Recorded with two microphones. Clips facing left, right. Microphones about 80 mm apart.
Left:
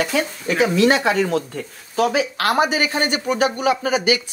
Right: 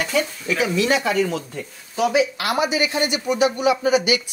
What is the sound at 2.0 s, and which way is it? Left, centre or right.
A man's voice, left.